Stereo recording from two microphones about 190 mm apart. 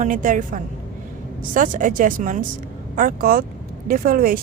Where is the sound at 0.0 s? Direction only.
45° right (ahead or behind).